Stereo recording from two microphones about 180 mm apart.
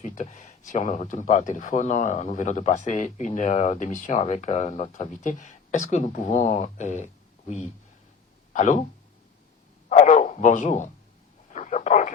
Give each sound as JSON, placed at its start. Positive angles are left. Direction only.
{"t": 0.0, "sound": "speech", "side_deg": 40}
{"t": 9.9, "sound": "a sound", "side_deg": 40}
{"t": 11.5, "sound": "radio", "side_deg": 40}